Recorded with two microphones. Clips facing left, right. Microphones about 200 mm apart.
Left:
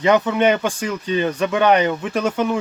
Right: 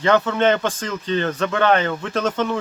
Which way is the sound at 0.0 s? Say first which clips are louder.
Left 1 dB; 15° left (ahead or behind).